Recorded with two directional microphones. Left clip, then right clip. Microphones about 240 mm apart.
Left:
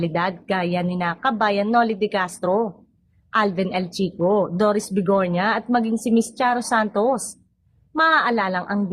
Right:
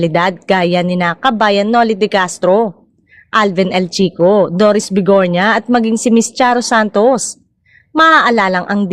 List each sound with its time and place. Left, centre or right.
0.0 s a woman's voice: right